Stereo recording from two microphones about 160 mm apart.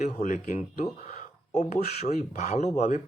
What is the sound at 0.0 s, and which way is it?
Speech, 50° left (ahead or behind).